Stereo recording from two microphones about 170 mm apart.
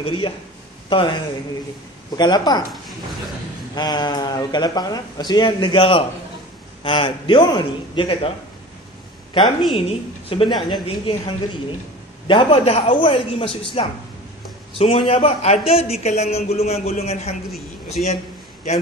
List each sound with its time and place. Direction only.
0.8 s speech: 30° left (ahead or behind)
3.7 s speech: 25° left (ahead or behind)
9.4 s a woman's voice: centre (ahead or behind)
9.8 s a man's voice: 35° left (ahead or behind)
12.3 s a man's voice: 30° left (ahead or behind)